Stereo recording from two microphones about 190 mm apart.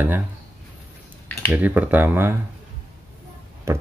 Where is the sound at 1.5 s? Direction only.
10° right (ahead or behind).